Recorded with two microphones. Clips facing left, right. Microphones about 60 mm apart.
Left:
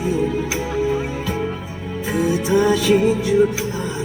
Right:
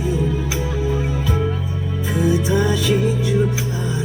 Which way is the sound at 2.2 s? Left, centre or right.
Left.